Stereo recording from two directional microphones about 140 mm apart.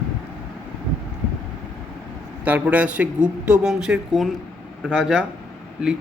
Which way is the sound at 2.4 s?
10° right (ahead or behind).